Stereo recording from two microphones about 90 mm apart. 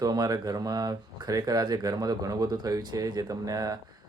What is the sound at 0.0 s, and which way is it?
Speech, 45° right (ahead or behind).